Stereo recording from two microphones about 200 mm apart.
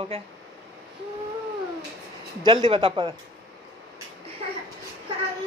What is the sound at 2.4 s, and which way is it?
Speech, 25° right (ahead or behind).